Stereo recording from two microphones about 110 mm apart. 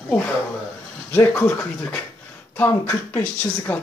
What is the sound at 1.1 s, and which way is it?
Speech, 20° left (ahead or behind).